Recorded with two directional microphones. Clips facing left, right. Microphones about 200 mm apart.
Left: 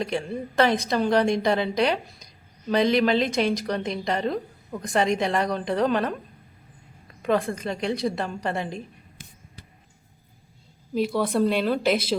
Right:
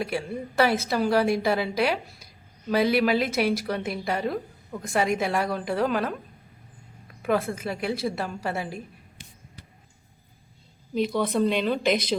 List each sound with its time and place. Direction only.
0.0 s a woman's voice: 5° right (ahead or behind)
7.2 s a woman's voice: 5° right (ahead or behind)
9.2 s basketball bounce: 50° left (ahead or behind)
10.9 s a woman's voice: 5° left (ahead or behind)